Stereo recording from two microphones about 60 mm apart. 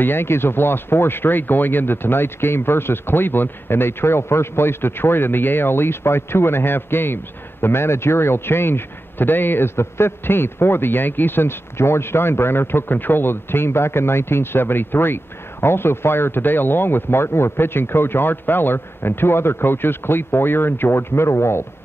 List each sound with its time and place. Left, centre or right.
0.0 s a man's voice: left